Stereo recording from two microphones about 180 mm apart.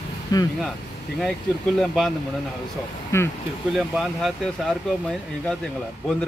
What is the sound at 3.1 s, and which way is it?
Speech, 15° left (ahead or behind).